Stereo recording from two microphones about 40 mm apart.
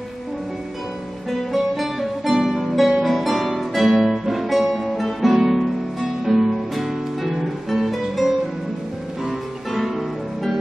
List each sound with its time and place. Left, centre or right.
1.3 s guitar: centre
7.3 s music: centre
9.7 s music: centre